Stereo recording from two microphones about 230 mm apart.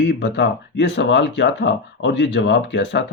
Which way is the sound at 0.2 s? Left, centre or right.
Left.